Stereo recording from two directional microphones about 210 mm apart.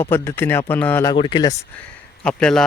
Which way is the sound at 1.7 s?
5° left (ahead or behind).